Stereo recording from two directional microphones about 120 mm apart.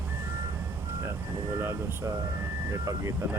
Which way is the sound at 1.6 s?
25° right (ahead or behind).